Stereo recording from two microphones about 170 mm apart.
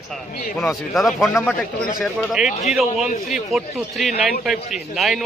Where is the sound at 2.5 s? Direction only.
40° left (ahead or behind).